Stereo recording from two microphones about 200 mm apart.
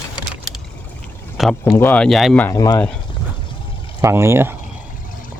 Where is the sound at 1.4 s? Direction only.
Centre (ahead or behind).